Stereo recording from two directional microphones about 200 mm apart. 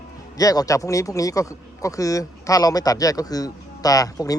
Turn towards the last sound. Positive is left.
turn(degrees=15)  # may be behind; listen again after turning